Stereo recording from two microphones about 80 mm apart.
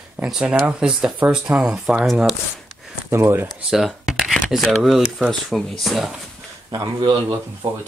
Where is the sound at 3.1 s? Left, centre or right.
Right.